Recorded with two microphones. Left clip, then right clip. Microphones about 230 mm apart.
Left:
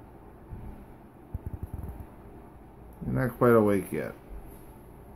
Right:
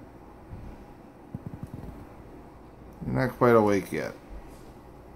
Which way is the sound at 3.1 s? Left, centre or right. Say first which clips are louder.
Right 1 dB; centre.